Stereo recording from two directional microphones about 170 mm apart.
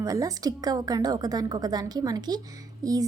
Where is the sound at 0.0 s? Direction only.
20° right (ahead or behind).